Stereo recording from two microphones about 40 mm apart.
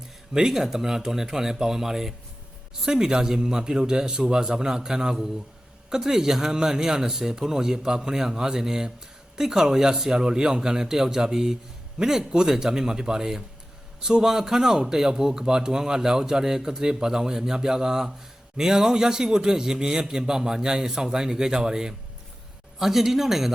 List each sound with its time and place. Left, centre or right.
0.3 s a man's voice: centre